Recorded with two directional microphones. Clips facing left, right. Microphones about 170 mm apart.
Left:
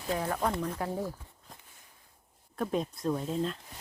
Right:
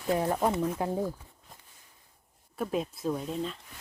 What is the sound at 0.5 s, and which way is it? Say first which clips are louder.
Speech: right 4 dB; 5° right (ahead or behind).